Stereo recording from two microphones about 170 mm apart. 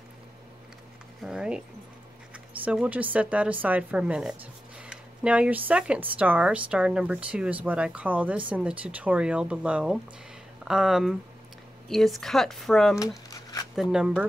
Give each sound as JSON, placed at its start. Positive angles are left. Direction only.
{"t": 1.2, "sound": "speech", "side_deg": -5}
{"t": 13.3, "sound": "a sound", "side_deg": 20}
{"t": 13.7, "sound": "speech", "side_deg": -5}